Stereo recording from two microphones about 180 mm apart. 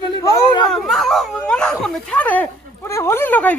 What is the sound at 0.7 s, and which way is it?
Speech, centre (ahead or behind).